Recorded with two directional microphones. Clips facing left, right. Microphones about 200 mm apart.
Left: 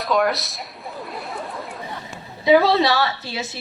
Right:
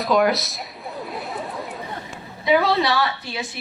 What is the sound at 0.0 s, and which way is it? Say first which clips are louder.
Chatter: right 2 dB; centre (ahead or behind).